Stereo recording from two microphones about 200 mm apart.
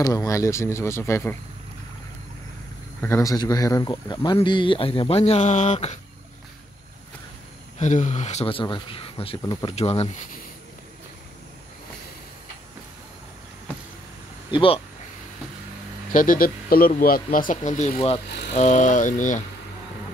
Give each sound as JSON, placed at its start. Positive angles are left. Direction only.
{"t": 0.0, "sound": "speech", "side_deg": 20}
{"t": 3.0, "sound": "speech", "side_deg": 15}
{"t": 7.8, "sound": "speech", "side_deg": 35}
{"t": 14.5, "sound": "speech", "side_deg": 25}
{"t": 16.1, "sound": "speech", "side_deg": 45}